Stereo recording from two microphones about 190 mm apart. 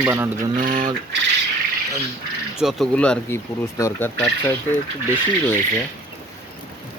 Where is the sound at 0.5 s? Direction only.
45° right (ahead or behind).